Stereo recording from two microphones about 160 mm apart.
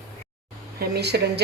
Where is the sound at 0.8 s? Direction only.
90° right.